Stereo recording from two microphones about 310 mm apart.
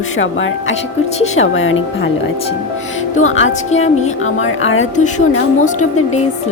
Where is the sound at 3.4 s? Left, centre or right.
Left.